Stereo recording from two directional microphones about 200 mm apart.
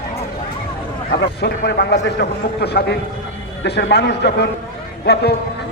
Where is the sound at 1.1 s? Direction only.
55° left (ahead or behind).